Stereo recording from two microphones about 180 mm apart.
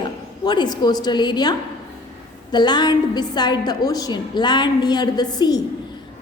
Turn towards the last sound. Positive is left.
turn(degrees=20)  # may be behind; listen again after turning